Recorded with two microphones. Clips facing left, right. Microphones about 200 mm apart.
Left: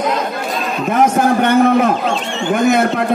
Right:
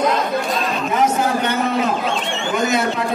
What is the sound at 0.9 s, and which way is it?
A man's voice, 55° left (ahead or behind).